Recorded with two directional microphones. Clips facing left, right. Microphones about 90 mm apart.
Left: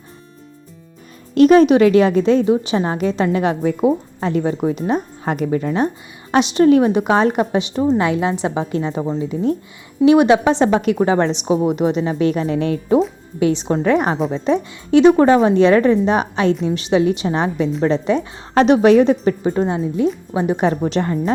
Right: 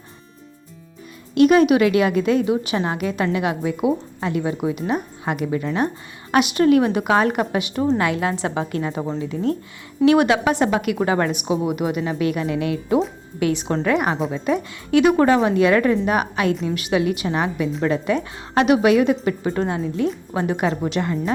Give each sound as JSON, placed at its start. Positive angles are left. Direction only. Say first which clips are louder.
{"t": 1.4, "sound": "speech", "louder": "left 4 dB", "side_deg": 35}
{"t": 6.3, "sound": "a woman's voice", "louder": "left 3 dB", "side_deg": 25}
{"t": 13.4, "sound": "a woman's voice", "louder": "left 4 dB", "side_deg": 25}